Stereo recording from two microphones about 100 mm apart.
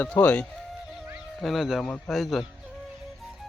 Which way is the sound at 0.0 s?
15° left (ahead or behind).